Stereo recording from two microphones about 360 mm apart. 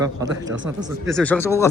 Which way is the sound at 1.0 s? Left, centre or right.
Centre.